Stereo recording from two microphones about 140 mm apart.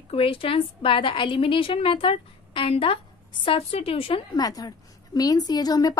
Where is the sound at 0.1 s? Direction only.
40° left (ahead or behind).